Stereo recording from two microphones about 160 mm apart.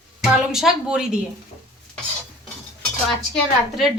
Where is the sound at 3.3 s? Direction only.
Centre (ahead or behind).